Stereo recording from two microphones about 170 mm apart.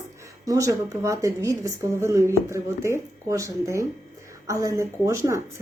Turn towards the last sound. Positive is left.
turn(degrees=-15)  # may be behind; listen again after turning